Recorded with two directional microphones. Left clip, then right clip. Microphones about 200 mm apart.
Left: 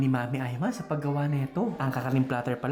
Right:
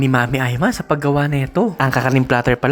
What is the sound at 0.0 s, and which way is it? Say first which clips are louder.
Speech: right 13 dB; 35° right (ahead or behind).